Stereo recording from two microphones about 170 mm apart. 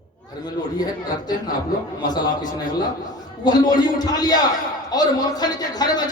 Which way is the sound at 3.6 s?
25° left (ahead or behind).